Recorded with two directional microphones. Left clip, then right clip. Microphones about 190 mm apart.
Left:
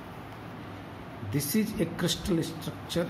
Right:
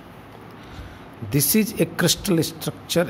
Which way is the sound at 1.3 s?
60° right (ahead or behind).